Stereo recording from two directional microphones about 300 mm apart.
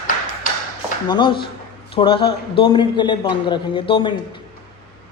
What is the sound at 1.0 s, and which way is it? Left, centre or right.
A man's voice, centre.